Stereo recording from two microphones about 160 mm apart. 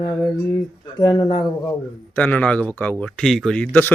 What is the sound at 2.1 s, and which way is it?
A man's voice, 10° left (ahead or behind).